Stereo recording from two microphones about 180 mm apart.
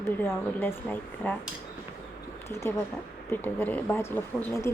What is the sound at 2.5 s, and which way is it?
Speech, 15° left (ahead or behind).